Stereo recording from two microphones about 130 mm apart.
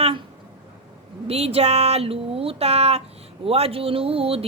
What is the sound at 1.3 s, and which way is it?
Mantra, 50° right (ahead or behind).